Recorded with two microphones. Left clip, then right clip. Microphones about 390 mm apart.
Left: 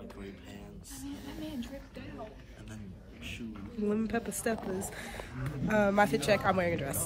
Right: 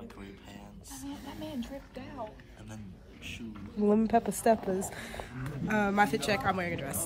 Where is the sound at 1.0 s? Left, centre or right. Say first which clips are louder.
Right 1 dB; right.